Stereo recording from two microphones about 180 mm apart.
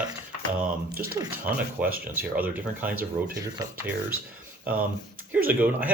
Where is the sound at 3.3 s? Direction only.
20° right (ahead or behind).